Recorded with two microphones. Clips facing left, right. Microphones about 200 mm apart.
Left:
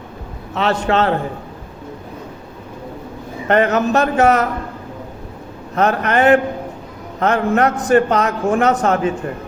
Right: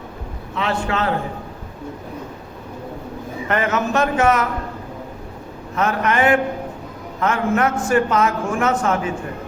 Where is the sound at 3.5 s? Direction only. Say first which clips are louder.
Left 6 dB; 35° left (ahead or behind).